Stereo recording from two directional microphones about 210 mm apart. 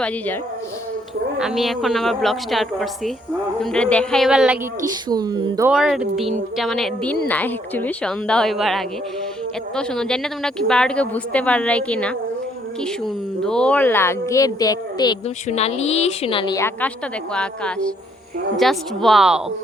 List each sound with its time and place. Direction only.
1.4 s speech: centre (ahead or behind)
5.0 s speech: 20° right (ahead or behind)
5.7 s speech: centre (ahead or behind)
13.4 s speech: 5° left (ahead or behind); by 15.2 s 20° left (ahead or behind)
15.4 s a woman's voice: 30° left (ahead or behind); by 19.4 s centre (ahead or behind)